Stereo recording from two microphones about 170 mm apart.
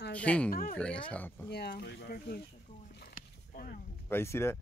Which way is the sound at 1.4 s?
70° left (ahead or behind).